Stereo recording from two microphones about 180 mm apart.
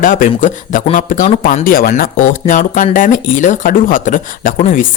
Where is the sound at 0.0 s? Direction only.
50° left (ahead or behind).